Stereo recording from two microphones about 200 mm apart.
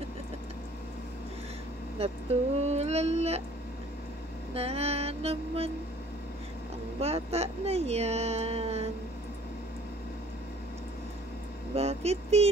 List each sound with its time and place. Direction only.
2.0 s speech: 30° right (ahead or behind)
2.6 s a sound: 30° right (ahead or behind)
4.6 s speech: 30° right (ahead or behind)
7.0 s speech: 30° right (ahead or behind)
11.7 s speech: 30° right (ahead or behind)